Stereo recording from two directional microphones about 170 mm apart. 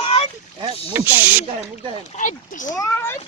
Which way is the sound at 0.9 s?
10° right (ahead or behind).